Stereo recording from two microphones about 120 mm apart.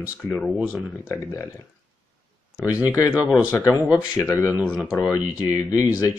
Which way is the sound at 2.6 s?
30° left (ahead or behind).